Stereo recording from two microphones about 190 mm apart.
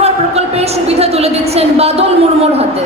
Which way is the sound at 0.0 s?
35° right (ahead or behind).